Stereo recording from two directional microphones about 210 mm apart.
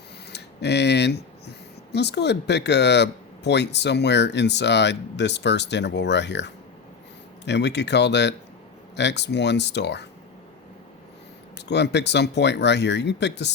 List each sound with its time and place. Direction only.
0.3 s a sound: 55° left (ahead or behind)
1.9 s speech: 55° left (ahead or behind)
11.5 s speech: 55° left (ahead or behind)